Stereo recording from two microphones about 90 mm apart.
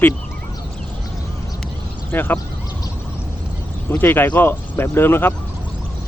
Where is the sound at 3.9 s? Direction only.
25° left (ahead or behind).